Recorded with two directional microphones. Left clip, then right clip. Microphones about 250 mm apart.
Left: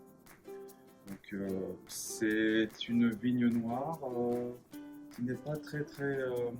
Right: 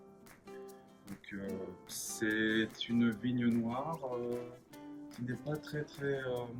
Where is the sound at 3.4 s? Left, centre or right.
Centre.